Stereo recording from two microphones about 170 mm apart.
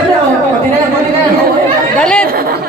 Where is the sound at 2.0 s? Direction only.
5° left (ahead or behind).